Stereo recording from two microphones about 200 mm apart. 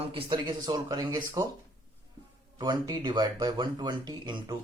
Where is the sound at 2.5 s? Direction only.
20° right (ahead or behind).